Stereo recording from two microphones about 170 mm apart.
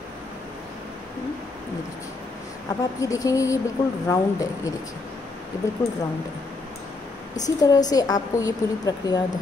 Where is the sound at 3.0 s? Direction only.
20° left (ahead or behind).